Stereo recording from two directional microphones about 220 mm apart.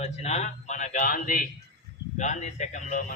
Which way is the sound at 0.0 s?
30° left (ahead or behind).